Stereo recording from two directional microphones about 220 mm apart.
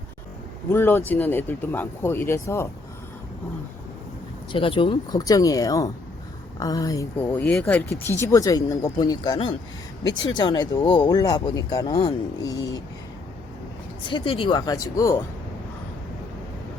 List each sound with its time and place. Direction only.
0.7 s speech: 10° left (ahead or behind)
4.5 s speech: 25° left (ahead or behind)
14.0 s speech: 20° left (ahead or behind)